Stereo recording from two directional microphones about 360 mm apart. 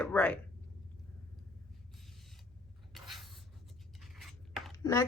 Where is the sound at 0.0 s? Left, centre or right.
Centre.